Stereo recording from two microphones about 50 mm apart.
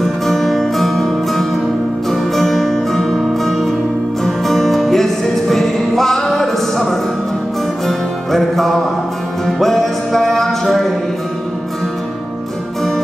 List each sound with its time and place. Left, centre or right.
0.0 s music: centre